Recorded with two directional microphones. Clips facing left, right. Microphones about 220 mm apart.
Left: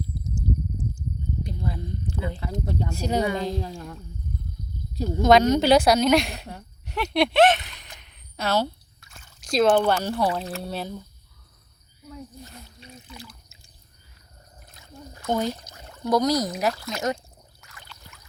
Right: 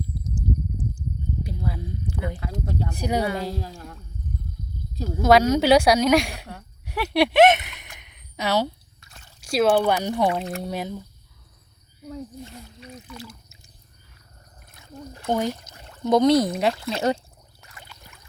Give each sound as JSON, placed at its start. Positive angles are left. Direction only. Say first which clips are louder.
{"t": 0.3, "sound": "a sound", "louder": "right 1 dB", "side_deg": -55}
{"t": 1.5, "sound": "speech", "louder": "right 1 dB", "side_deg": -5}
{"t": 3.6, "sound": "speech", "louder": "left 3 dB", "side_deg": 20}
{"t": 5.0, "sound": "speech", "louder": "even", "side_deg": -5}
{"t": 6.8, "sound": "a sound", "louder": "right 2 dB", "side_deg": -10}
{"t": 9.4, "sound": "speech", "louder": "even", "side_deg": -10}
{"t": 12.8, "sound": "speech", "louder": "right 5 dB", "side_deg": 30}
{"t": 15.3, "sound": "speech", "louder": "right 1 dB", "side_deg": -15}
{"t": 16.0, "sound": "speech", "louder": "right 5 dB", "side_deg": -25}
{"t": 17.6, "sound": "a sound", "louder": "right 4 dB", "side_deg": -30}